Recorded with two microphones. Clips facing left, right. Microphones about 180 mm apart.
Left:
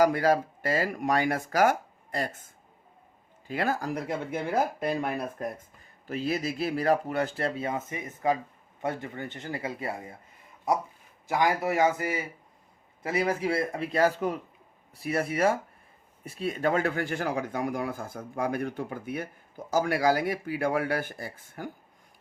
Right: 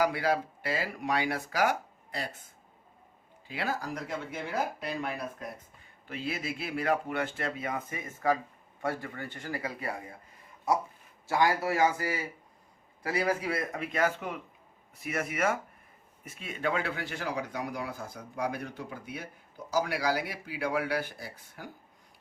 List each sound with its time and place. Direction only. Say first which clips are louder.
0.0 s speech: left 5 dB; 45° left (ahead or behind); by 10.2 s 25° left (ahead or behind)
11.3 s speech: left 1 dB; 20° left (ahead or behind); by 21.7 s 50° left (ahead or behind)